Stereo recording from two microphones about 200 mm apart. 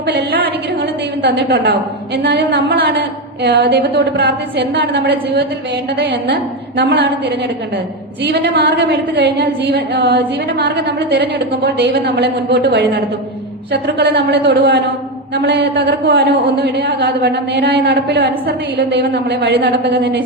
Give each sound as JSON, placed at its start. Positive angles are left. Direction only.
{"t": 0.0, "sound": "speech", "side_deg": -55}
{"t": 13.8, "sound": "speech", "side_deg": -55}